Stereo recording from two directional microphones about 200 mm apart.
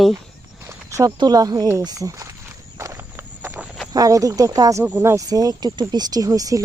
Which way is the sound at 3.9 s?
15° right (ahead or behind).